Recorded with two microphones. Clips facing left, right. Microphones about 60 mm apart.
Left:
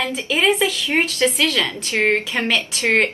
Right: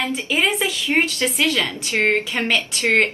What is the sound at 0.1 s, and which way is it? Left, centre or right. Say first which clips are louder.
A woman's voice: left 2 dB; centre.